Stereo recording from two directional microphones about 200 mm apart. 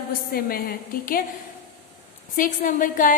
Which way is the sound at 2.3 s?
45° left (ahead or behind).